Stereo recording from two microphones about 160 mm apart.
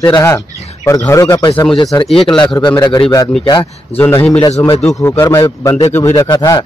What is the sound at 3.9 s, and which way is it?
A man's voice, 10° left (ahead or behind).